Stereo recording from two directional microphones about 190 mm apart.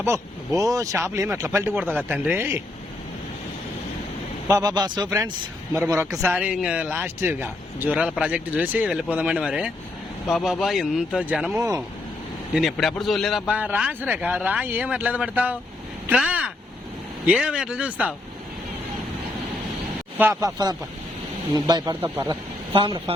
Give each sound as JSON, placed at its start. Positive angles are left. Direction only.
{"t": 0.0, "sound": "speech", "side_deg": -15}
{"t": 4.4, "sound": "speech", "side_deg": -20}
{"t": 20.1, "sound": "speech", "side_deg": -15}
{"t": 22.1, "sound": "speech", "side_deg": -10}
{"t": 22.7, "sound": "speech", "side_deg": -25}